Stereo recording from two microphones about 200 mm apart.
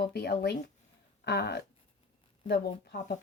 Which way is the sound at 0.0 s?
50° left (ahead or behind).